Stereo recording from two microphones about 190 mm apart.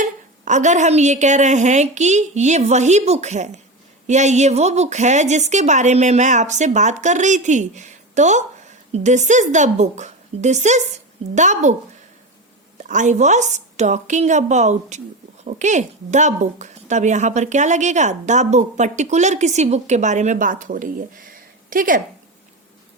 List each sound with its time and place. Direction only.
0.0 s speech: 40° right (ahead or behind)
12.9 s speech: 40° right (ahead or behind)